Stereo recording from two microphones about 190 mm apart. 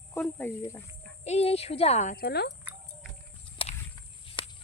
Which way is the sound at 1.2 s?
35° left (ahead or behind).